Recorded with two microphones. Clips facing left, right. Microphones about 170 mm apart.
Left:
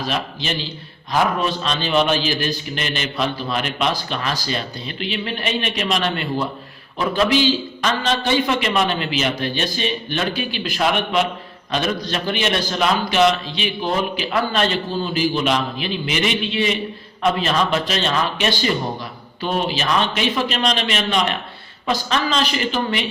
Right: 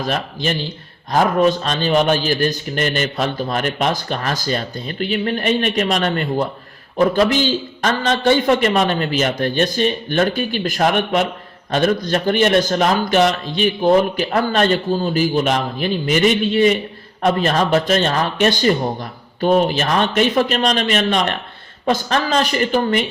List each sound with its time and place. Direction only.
0.0 s a man's voice: 50° right (ahead or behind)